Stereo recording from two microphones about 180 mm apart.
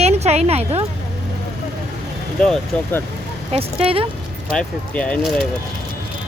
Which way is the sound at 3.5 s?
30° right (ahead or behind).